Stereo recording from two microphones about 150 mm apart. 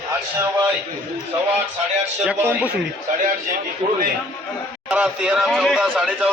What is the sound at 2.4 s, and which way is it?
Speech, 10° right (ahead or behind).